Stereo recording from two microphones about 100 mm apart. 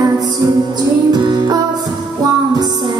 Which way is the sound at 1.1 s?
45° right (ahead or behind).